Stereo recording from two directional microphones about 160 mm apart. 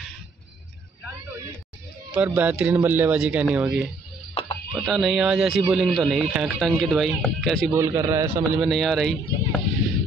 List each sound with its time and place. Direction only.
2.1 s speech: 10° right (ahead or behind)
4.3 s music: 25° left (ahead or behind)
4.7 s speech: centre (ahead or behind)
7.7 s speech: 15° right (ahead or behind)
8.5 s speech: centre (ahead or behind)